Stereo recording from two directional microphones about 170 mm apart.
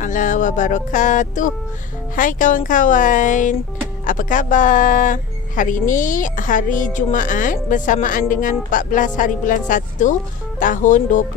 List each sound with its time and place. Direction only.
0.0 s speech: 50° left (ahead or behind)